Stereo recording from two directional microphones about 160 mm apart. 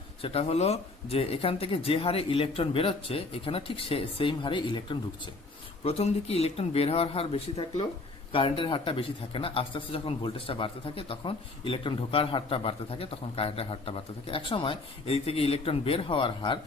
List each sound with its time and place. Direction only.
0.2 s speech: 40° left (ahead or behind)